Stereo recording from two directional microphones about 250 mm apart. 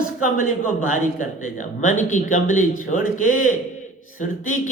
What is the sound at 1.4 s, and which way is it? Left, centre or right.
Speech, left.